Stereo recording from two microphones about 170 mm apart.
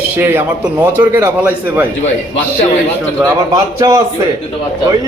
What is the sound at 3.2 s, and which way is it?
Speech, 20° right (ahead or behind).